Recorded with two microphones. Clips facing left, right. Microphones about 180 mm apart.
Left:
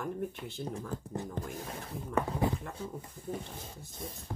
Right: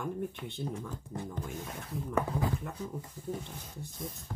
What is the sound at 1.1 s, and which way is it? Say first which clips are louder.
Speech: even; 35° left (ahead or behind).